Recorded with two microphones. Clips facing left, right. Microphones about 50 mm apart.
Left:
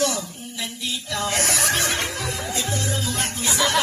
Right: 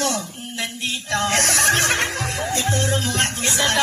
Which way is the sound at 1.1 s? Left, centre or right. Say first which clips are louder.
Right 4 dB; right.